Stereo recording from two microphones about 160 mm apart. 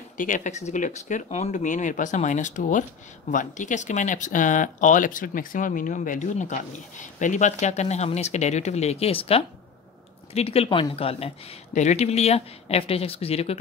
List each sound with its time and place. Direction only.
0.2 s speech: 50° left (ahead or behind)